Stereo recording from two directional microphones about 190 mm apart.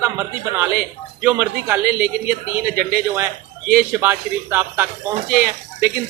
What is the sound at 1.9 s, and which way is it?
Speech, 55° right (ahead or behind).